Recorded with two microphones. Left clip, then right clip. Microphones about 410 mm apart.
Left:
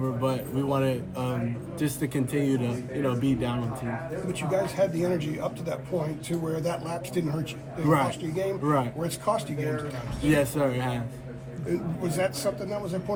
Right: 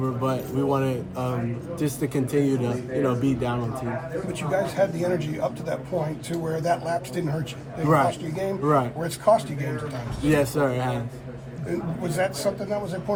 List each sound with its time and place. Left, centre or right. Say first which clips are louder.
0.0 s a man's voice: right 2 dB; centre
4.3 s speech: right 1 dB; right
7.9 s a man's voice: right 4 dB; centre
9.0 s speech: right 7 dB; right
10.2 s a man's voice: right 2 dB; centre
12.0 s speech: right 3 dB; right